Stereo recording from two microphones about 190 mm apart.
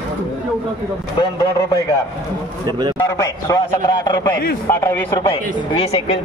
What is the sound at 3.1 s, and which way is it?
A man's voice, 15° left (ahead or behind).